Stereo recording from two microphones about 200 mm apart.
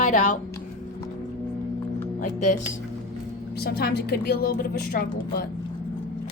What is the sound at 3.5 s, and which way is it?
A woman's voice, 50° left (ahead or behind).